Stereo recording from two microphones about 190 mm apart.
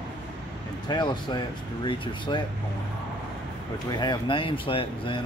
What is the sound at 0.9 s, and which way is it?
Speech, 25° left (ahead or behind).